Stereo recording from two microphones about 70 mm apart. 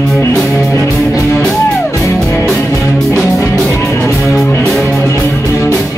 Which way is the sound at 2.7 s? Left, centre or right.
Left.